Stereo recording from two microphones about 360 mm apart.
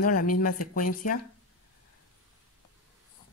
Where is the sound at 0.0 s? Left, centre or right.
Left.